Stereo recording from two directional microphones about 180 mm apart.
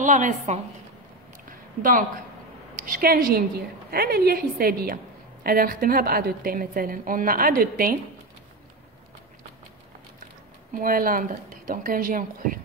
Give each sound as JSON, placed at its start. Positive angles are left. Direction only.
{"t": 0.0, "sound": "speech", "side_deg": -45}
{"t": 1.5, "sound": "a sound", "side_deg": -50}
{"t": 2.7, "sound": "a woman's voice", "side_deg": -50}
{"t": 10.8, "sound": "speech", "side_deg": -50}